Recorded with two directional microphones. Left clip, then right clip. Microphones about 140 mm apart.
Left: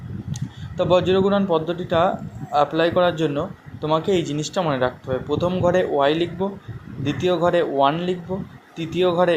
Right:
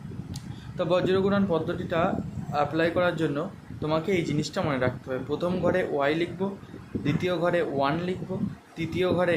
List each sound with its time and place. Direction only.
0.3 s speech: 15° left (ahead or behind)